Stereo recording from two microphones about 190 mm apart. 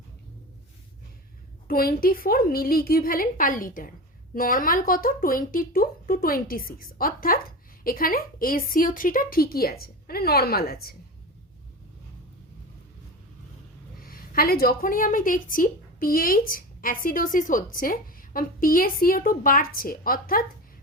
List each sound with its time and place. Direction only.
1.6 s a woman's voice: 50° left (ahead or behind)
14.0 s a woman's voice: 50° left (ahead or behind)